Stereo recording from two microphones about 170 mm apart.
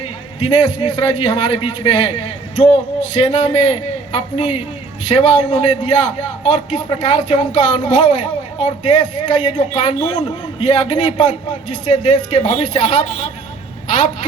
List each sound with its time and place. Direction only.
0.3 s a man's voice: 25° left (ahead or behind)